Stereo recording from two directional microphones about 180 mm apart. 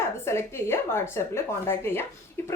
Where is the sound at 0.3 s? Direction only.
15° left (ahead or behind).